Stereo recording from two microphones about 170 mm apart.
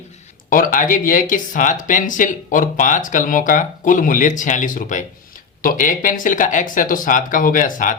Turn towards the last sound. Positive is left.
turn(degrees=50)  # may be behind; listen again after turning